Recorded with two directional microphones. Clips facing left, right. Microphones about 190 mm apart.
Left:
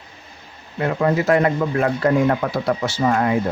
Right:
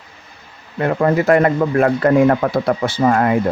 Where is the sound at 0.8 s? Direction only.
55° right (ahead or behind).